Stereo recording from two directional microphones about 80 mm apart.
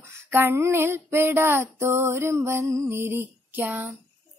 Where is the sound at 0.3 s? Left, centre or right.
Right.